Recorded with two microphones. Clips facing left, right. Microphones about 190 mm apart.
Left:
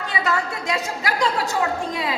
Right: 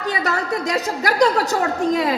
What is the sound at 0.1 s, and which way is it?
A woman's voice, 40° right (ahead or behind).